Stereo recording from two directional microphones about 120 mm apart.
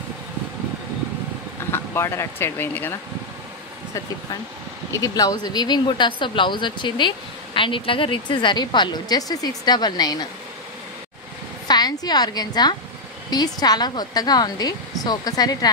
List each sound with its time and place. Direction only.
1.7 s speech: 20° left (ahead or behind)
4.9 s speech: 30° left (ahead or behind)
11.6 s a woman's voice: 35° left (ahead or behind)